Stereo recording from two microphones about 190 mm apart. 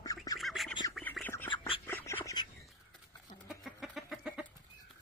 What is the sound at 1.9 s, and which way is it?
Duck, 15° left (ahead or behind).